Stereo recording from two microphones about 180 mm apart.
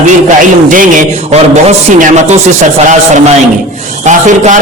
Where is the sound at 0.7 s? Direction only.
45° right (ahead or behind).